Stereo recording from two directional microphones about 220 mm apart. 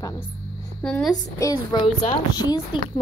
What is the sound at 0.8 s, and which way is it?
Speech, 5° left (ahead or behind).